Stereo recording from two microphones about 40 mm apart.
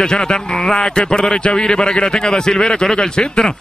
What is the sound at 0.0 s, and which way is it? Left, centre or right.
A man's voice, centre.